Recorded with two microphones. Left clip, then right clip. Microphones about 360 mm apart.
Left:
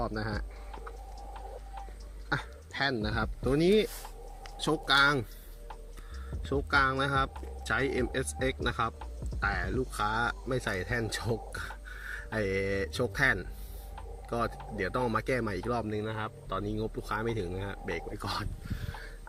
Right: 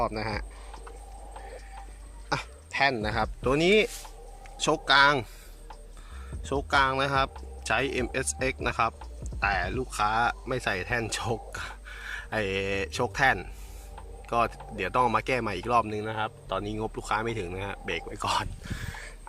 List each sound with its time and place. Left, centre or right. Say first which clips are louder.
0.0 s speech: right 5 dB; centre
2.7 s speech: right 6 dB; centre
3.0 s speech: right 5 dB; centre
6.4 s speech: right 3 dB; centre
15.8 s speech: right 5 dB; right
16.1 s speech: right 5 dB; centre